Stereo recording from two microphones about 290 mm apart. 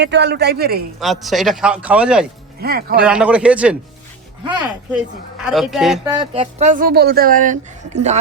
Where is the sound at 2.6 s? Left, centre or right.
Right.